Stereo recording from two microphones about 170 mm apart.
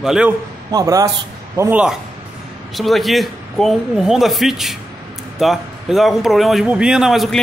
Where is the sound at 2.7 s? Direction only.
Centre (ahead or behind).